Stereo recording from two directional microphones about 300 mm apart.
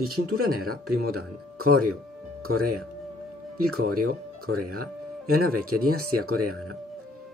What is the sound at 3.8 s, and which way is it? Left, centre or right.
Speech, right.